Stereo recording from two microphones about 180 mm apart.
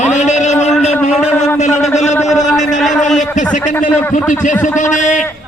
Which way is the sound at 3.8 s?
10° left (ahead or behind).